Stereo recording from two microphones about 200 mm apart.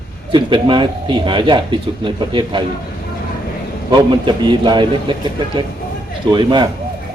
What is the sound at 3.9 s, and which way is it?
A man's voice, 20° right (ahead or behind).